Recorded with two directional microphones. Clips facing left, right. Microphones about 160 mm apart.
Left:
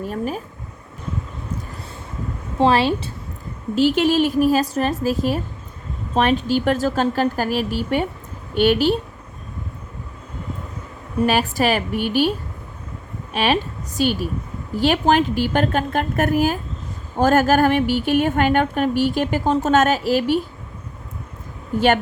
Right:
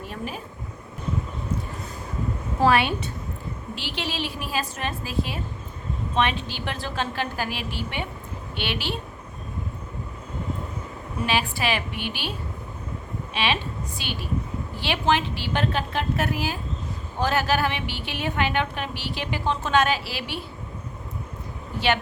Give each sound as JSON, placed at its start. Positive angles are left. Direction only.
{"t": 0.0, "sound": "a woman's voice", "side_deg": 45}
{"t": 2.6, "sound": "a woman's voice", "side_deg": 30}
{"t": 3.8, "sound": "a woman's voice", "side_deg": 45}
{"t": 11.3, "sound": "a woman's voice", "side_deg": 45}
{"t": 13.3, "sound": "a woman's voice", "side_deg": 45}
{"t": 21.8, "sound": "a woman's voice", "side_deg": 45}